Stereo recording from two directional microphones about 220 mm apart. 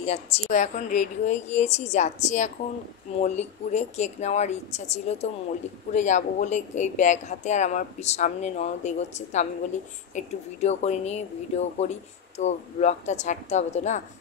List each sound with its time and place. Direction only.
0.0 s speech: 30° left (ahead or behind)